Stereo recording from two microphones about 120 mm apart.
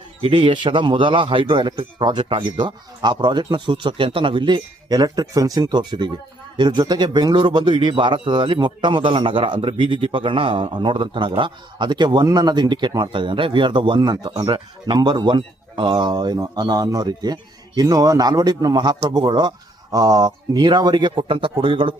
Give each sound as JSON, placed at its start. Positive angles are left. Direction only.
{"t": 0.2, "sound": "speech", "side_deg": -45}